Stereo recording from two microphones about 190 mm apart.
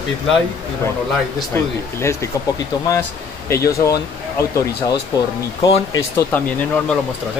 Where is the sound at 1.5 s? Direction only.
15° left (ahead or behind).